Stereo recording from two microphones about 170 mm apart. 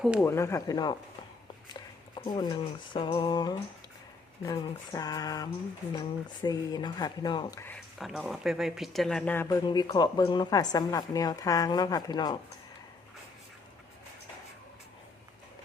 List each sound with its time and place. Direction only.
0.2 s a woman's voice: 15° left (ahead or behind)
7.9 s speech: centre (ahead or behind)
9.6 s a woman's voice: 25° left (ahead or behind)